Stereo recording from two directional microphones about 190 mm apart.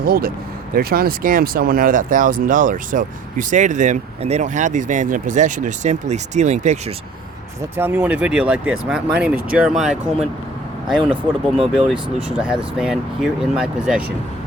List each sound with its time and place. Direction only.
0.0 s speech: 50° right (ahead or behind)
7.8 s speech: 10° right (ahead or behind)
11.5 s speech: centre (ahead or behind)